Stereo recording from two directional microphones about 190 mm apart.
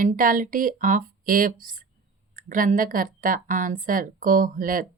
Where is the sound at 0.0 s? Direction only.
45° right (ahead or behind).